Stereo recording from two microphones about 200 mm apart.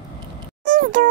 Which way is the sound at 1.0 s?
40° right (ahead or behind).